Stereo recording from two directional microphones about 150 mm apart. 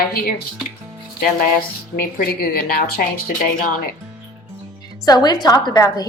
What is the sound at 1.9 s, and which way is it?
A woman's voice, 90° left.